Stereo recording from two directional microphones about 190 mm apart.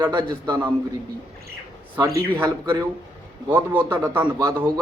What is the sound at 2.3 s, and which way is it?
A man's voice, 15° right (ahead or behind).